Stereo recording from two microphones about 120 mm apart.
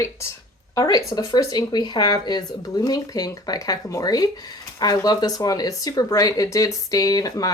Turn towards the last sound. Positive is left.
turn(degrees=30)  # may be behind; listen again after turning